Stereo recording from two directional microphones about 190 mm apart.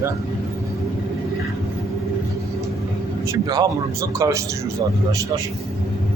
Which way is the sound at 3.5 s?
20° right (ahead or behind).